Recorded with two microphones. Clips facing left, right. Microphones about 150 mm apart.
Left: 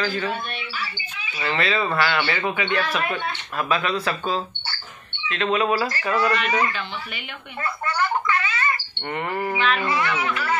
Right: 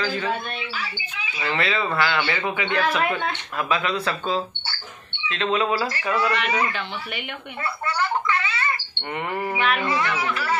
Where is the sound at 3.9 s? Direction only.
20° left (ahead or behind).